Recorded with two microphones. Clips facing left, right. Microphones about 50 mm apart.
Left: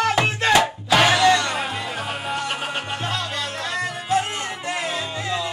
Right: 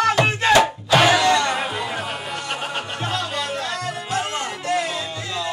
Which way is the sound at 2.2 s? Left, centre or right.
Centre.